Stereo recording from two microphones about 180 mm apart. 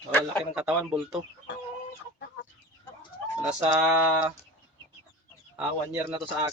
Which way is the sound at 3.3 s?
5° right (ahead or behind).